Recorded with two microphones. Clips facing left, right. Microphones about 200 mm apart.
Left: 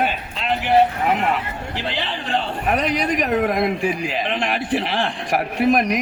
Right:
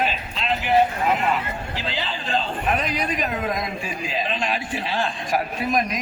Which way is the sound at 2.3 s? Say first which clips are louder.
Left 2 dB; 75° left (ahead or behind).